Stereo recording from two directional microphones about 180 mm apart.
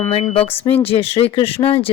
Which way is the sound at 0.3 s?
35° left (ahead or behind).